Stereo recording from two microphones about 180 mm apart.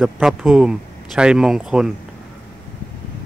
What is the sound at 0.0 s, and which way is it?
Speech, centre (ahead or behind).